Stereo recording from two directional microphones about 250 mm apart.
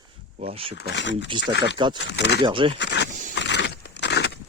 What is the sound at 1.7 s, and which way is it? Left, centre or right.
Speech, centre.